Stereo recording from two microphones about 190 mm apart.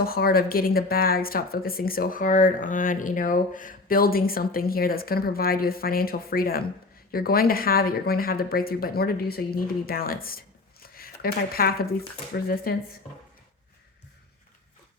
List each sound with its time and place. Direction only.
0.0 s speech: 50° left (ahead or behind)